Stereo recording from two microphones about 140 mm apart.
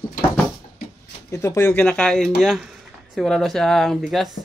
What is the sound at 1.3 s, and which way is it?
Speech, 20° left (ahead or behind).